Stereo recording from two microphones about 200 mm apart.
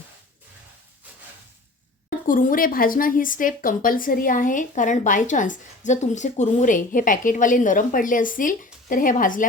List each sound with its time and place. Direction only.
2.0 s a woman's voice: 45° left (ahead or behind)